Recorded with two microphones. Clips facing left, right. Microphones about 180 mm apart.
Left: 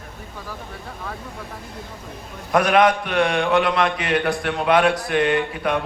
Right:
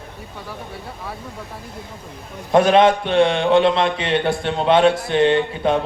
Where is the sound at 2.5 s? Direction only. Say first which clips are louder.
Right 3 dB; 25° right (ahead or behind).